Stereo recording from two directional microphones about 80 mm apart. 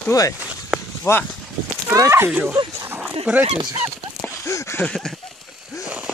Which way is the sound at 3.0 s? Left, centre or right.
Centre.